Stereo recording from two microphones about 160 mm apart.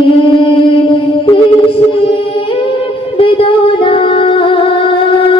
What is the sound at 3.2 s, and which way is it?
Music, 35° left (ahead or behind).